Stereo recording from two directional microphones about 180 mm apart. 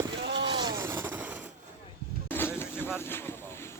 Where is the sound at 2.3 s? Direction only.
10° left (ahead or behind).